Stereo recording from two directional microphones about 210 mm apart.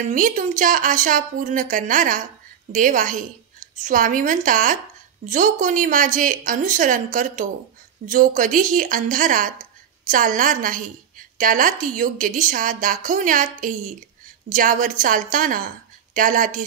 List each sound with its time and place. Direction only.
0.0 s speech: 40° right (ahead or behind)